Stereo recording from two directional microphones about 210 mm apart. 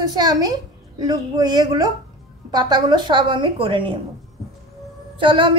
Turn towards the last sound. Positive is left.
turn(degrees=-25)  # may be behind; listen again after turning